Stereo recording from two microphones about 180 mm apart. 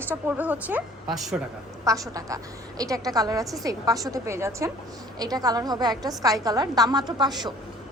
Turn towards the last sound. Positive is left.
turn(degrees=-20)  # may be behind; listen again after turning